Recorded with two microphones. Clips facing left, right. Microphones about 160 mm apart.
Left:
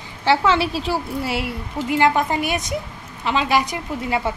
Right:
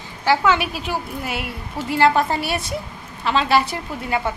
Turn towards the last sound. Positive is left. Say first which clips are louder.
# left 1 dB
turn(degrees=15)  # may be behind; listen again after turning